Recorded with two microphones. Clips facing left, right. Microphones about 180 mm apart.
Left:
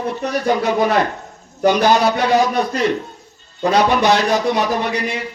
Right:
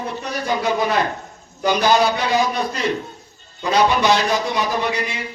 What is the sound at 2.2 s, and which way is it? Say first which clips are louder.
Speech: left 4 dB; 55° left (ahead or behind).